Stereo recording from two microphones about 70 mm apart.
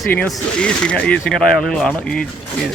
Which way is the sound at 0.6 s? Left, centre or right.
Centre.